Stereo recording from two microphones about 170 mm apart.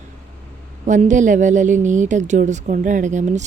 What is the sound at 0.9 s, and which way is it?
A woman's voice, 45° right (ahead or behind).